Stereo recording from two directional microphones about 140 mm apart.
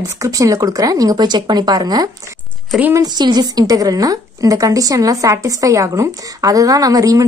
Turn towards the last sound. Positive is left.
turn(degrees=-25)  # may be behind; listen again after turning